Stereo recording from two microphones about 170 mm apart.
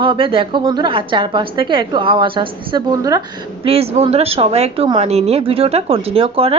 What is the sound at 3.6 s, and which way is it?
Speech, 35° right (ahead or behind).